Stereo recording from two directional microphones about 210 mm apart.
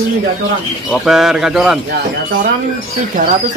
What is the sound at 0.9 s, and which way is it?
Speech, centre (ahead or behind).